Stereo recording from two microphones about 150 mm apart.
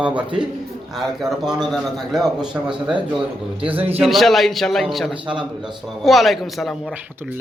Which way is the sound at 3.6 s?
40° right (ahead or behind).